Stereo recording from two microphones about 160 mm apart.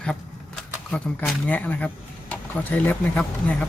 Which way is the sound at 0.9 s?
5° left (ahead or behind).